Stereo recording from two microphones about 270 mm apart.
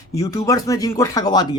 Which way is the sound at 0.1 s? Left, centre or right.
Centre.